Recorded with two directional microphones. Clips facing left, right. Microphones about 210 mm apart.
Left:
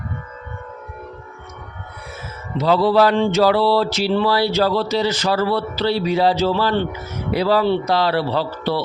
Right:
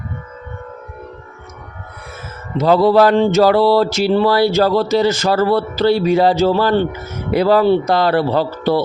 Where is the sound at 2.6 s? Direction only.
45° right (ahead or behind).